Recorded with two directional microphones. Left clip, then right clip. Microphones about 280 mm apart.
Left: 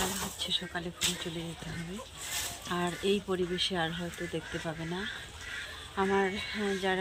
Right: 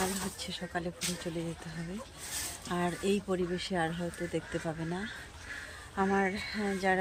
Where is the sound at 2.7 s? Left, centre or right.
Centre.